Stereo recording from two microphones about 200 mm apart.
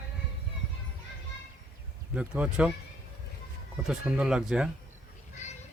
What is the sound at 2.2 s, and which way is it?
Speech, 5° right (ahead or behind).